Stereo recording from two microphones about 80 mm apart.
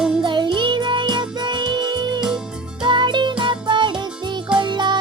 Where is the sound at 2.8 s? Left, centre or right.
Right.